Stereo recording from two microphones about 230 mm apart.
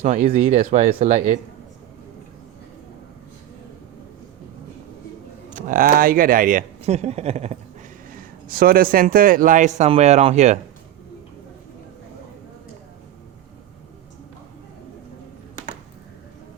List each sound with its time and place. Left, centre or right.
0.0 s a man's voice: right
5.5 s a man's voice: right
8.1 s a man's voice: right